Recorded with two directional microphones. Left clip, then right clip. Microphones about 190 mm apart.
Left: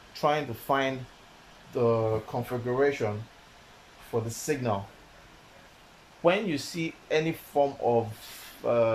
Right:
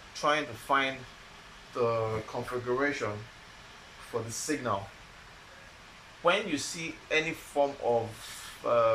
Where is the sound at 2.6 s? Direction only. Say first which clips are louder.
Left 4 dB; 40° left (ahead or behind).